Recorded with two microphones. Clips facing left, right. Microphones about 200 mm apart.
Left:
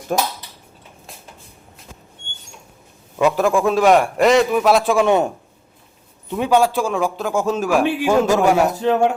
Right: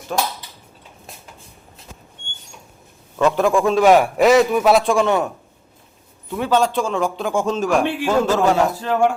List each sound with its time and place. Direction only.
0.1 s speech: 45° left (ahead or behind)
3.2 s a man's voice: 5° left (ahead or behind)
5.0 s a man's voice: 20° left (ahead or behind)
6.3 s a man's voice: 15° left (ahead or behind)